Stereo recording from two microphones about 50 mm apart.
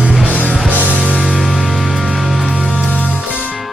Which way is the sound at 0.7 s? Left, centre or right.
Right.